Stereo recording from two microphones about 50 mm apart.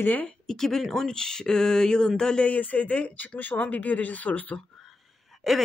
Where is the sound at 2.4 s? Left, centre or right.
Left.